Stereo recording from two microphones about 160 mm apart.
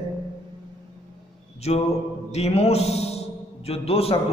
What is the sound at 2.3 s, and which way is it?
A man's voice, 40° left (ahead or behind).